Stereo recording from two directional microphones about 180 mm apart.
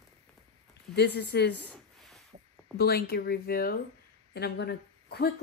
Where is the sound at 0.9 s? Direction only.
65° left (ahead or behind).